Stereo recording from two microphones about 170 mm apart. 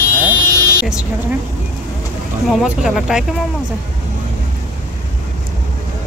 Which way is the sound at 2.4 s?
Centre (ahead or behind).